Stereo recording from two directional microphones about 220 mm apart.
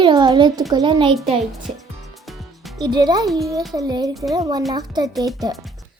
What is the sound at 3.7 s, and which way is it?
Speech, 20° right (ahead or behind).